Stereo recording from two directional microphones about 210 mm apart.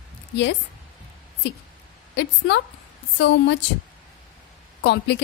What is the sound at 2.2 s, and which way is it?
A woman's voice, 55° left (ahead or behind).